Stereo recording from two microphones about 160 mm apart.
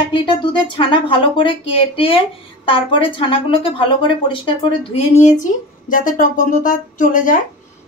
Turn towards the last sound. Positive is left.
turn(degrees=55)  # may be behind; listen again after turning